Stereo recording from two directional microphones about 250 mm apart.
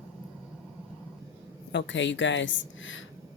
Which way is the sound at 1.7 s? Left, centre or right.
Left.